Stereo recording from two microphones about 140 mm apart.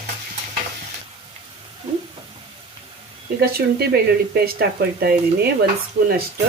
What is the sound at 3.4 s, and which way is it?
Speech, 90° right.